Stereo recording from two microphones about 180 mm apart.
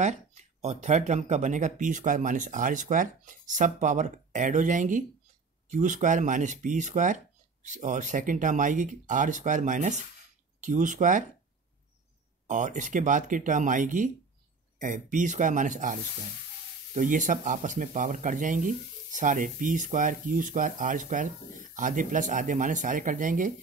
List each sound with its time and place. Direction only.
0.0 s speech: 40° right (ahead or behind)
12.4 s speech: 45° right (ahead or behind)